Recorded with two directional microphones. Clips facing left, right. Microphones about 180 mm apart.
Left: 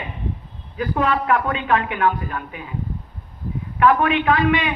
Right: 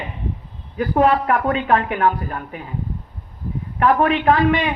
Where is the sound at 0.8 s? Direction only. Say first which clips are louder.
Right 4 dB; 40° right (ahead or behind).